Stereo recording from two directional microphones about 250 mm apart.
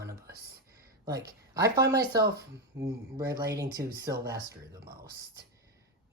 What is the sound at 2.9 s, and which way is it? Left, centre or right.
Speech, centre.